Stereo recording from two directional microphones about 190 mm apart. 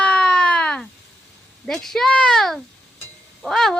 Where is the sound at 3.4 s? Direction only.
Centre (ahead or behind).